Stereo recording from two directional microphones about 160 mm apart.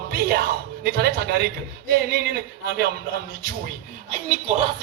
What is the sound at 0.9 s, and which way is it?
Speech, 75° right (ahead or behind).